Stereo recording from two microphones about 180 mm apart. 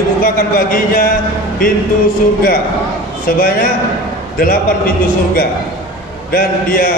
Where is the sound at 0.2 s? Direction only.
50° left (ahead or behind).